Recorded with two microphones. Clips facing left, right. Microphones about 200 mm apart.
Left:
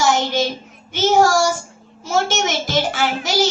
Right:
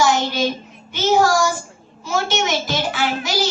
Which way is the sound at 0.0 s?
45° left (ahead or behind).